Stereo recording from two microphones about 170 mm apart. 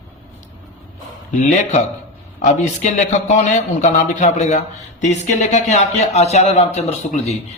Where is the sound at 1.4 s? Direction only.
45° left (ahead or behind).